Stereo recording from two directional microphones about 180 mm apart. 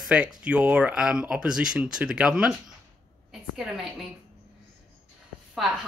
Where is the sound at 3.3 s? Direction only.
Centre (ahead or behind).